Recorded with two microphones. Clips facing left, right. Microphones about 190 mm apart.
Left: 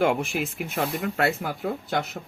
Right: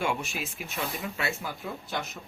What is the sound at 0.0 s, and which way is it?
Speech, 55° left (ahead or behind).